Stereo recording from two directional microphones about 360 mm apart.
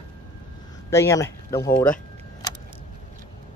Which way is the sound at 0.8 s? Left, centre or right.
Centre.